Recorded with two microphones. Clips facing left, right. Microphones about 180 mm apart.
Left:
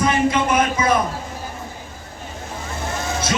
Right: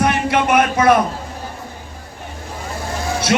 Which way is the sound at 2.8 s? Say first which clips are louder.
Right 2 dB; 20° left (ahead or behind).